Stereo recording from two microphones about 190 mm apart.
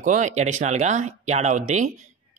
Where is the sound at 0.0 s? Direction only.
40° right (ahead or behind).